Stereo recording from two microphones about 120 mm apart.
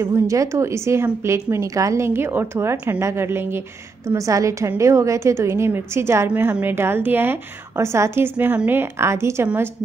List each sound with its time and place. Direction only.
0.0 s a woman's voice: 25° right (ahead or behind)